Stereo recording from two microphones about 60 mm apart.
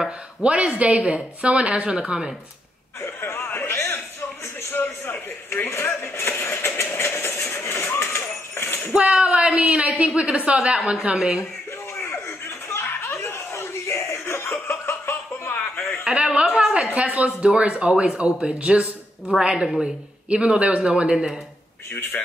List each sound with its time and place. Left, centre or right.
0.4 s speech: centre
3.0 s a man's voice: left
5.5 s vehicle: left
8.9 s speech: centre
12.6 s a sound: left
16.0 s speech: centre